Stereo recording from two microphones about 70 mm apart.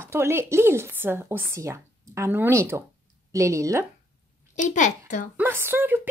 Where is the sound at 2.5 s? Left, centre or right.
Right.